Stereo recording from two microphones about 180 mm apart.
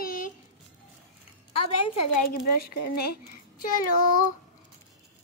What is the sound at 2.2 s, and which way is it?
Speech, 55° left (ahead or behind).